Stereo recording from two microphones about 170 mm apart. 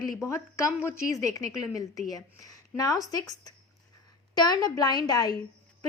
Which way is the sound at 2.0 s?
20° left (ahead or behind).